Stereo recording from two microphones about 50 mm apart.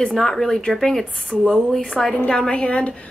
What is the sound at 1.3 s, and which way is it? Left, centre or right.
Speech, centre.